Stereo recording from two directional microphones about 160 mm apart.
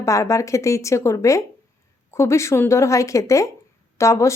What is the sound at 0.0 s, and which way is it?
Speech, 20° left (ahead or behind).